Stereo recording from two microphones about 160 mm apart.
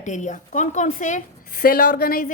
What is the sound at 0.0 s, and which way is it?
A woman's voice, 50° left (ahead or behind).